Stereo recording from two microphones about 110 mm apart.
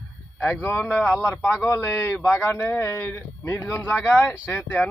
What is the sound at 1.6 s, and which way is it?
A man's voice, 20° left (ahead or behind).